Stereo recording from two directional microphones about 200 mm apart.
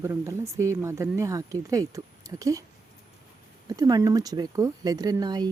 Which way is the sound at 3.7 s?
20° right (ahead or behind).